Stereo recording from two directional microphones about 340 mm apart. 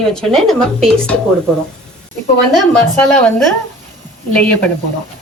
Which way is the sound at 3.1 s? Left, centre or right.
Centre.